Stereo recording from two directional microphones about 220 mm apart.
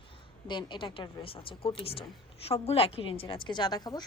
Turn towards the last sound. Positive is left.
turn(degrees=20)  # may be behind; listen again after turning